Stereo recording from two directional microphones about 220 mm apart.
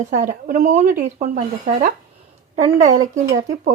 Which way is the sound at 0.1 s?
35° right (ahead or behind).